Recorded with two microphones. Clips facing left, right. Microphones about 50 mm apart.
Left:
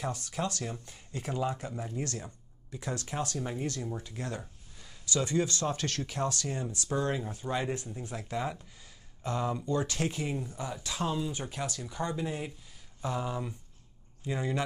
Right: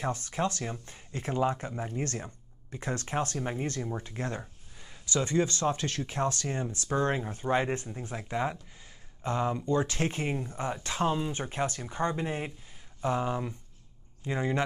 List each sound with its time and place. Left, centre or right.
0.0 s speech: right